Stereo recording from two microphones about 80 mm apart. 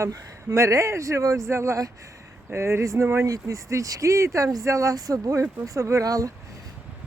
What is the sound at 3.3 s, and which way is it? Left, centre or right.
Speech, right.